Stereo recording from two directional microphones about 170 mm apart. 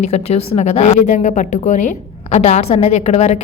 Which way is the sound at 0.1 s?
40° left (ahead or behind).